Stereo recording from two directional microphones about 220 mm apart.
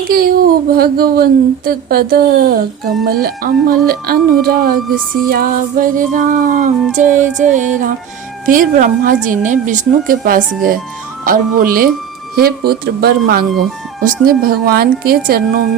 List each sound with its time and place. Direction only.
0.1 s a woman's voice: 40° right (ahead or behind)